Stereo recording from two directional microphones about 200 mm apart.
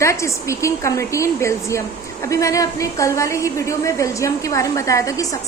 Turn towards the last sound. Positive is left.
turn(degrees=15)  # may be behind; listen again after turning